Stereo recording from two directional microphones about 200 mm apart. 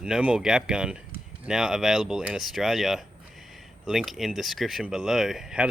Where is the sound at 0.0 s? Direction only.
5° right (ahead or behind).